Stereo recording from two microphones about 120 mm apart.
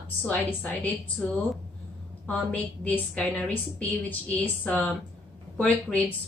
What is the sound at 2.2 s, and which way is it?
A woman's voice, 10° left (ahead or behind).